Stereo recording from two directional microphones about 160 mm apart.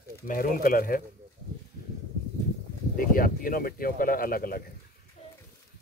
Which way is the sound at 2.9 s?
60° left (ahead or behind).